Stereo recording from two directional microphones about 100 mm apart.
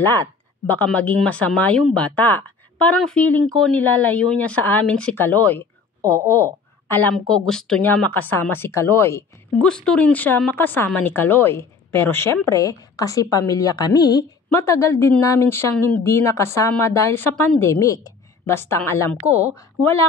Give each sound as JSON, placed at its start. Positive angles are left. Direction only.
{"t": 0.0, "sound": "a woman's voice", "side_deg": 20}
{"t": 3.0, "sound": "a woman's voice", "side_deg": 5}
{"t": 3.7, "sound": "a woman's voice", "side_deg": 20}
{"t": 7.2, "sound": "speech", "side_deg": 5}
{"t": 7.8, "sound": "speech", "side_deg": 20}
{"t": 9.6, "sound": "a woman's voice", "side_deg": 10}
{"t": 14.5, "sound": "speech", "side_deg": 30}
{"t": 18.4, "sound": "speech", "side_deg": 25}